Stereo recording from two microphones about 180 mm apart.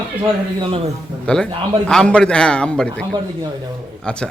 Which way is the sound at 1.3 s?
5° left (ahead or behind).